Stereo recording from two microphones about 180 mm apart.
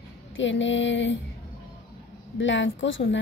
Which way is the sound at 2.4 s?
90° left.